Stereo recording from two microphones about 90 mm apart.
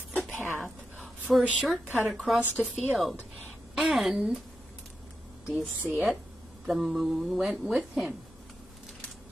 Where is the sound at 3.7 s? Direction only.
Centre (ahead or behind).